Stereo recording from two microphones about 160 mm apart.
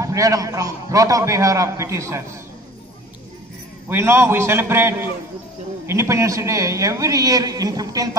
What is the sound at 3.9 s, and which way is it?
A man's voice, 15° right (ahead or behind).